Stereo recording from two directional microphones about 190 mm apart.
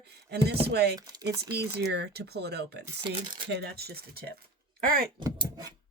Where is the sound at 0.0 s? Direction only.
60° right (ahead or behind).